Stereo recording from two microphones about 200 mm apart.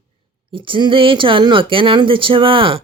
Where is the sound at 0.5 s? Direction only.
25° right (ahead or behind).